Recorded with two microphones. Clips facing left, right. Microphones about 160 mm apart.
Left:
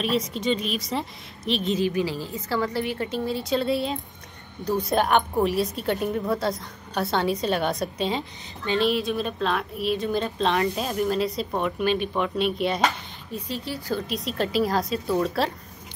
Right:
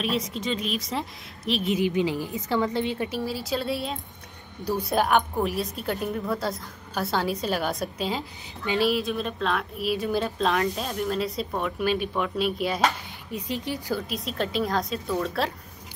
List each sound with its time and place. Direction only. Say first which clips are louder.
0.0 s a woman's voice: left 3 dB; centre (ahead or behind)
1.8 s a woman's voice: even; 20° right (ahead or behind)
3.1 s a woman's voice: left 3 dB; 5° right (ahead or behind)
13.3 s speech: right 1 dB; 15° right (ahead or behind)
14.0 s a woman's voice: left 2 dB; centre (ahead or behind)